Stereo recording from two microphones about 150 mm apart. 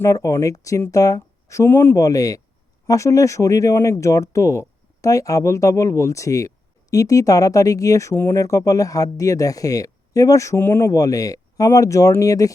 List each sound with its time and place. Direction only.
0.0 s speech: 20° left (ahead or behind)